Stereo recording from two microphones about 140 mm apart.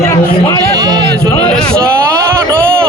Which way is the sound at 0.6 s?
30° right (ahead or behind).